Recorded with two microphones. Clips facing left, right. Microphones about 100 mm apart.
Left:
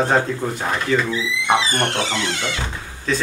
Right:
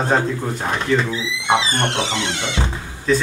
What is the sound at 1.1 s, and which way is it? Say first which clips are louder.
Speech: even; 20° right (ahead or behind).